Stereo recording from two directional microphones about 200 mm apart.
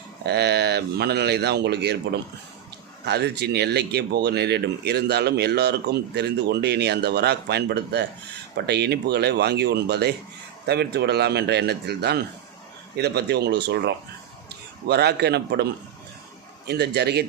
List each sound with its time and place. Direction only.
0.3 s speech: 55° right (ahead or behind)
3.0 s speech: 55° right (ahead or behind)
16.6 s speech: 55° right (ahead or behind)